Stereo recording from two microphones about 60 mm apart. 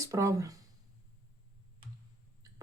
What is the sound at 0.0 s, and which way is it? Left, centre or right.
Speech, right.